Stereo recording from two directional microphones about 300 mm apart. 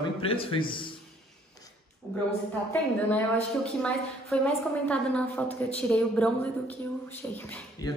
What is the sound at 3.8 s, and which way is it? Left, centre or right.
A woman's voice, centre.